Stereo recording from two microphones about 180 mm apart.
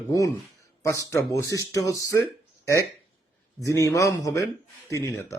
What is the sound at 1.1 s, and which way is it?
Speech, 20° left (ahead or behind).